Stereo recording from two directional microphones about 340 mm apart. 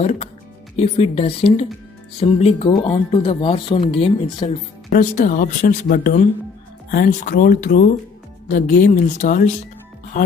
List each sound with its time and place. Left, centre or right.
0.7 s speech: centre